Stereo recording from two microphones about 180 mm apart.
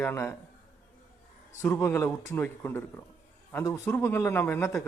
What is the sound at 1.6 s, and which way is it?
A man's voice, 10° left (ahead or behind).